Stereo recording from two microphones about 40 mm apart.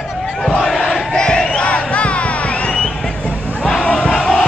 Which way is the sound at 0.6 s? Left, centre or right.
Centre.